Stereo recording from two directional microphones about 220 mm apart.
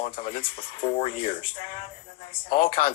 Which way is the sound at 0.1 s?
40° left (ahead or behind).